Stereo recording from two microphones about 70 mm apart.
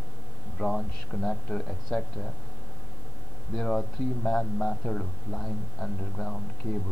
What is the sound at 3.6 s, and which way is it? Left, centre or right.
A man's voice, centre.